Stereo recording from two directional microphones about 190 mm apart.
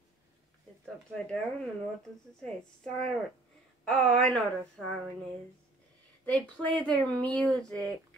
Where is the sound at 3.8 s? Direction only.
5° left (ahead or behind).